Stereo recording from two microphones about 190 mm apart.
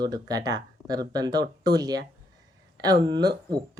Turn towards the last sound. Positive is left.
turn(degrees=-20)  # may be behind; listen again after turning